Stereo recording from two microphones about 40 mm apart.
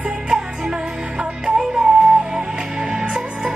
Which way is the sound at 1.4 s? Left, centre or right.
Right.